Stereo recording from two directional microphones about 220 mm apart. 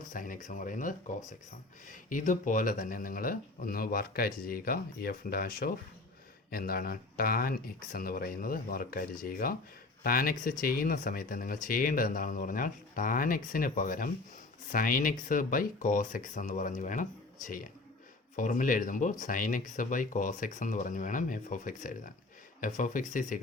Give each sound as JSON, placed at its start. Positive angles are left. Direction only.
{"t": 0.1, "sound": "speech", "side_deg": 35}